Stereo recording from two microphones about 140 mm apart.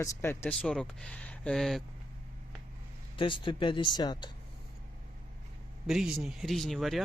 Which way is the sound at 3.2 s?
35° left (ahead or behind).